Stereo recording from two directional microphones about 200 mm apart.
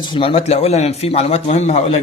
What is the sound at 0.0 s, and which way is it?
A man's voice, 25° left (ahead or behind).